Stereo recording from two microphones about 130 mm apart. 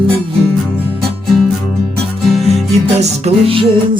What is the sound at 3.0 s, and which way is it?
Music, 50° right (ahead or behind).